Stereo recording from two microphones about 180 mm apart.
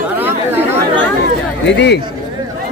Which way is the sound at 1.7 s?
75° left (ahead or behind).